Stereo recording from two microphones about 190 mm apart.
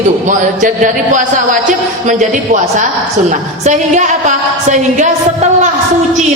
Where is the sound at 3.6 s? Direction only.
40° right (ahead or behind).